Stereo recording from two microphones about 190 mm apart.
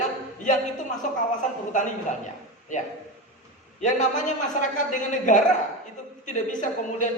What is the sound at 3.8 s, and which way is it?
Speech, 40° left (ahead or behind).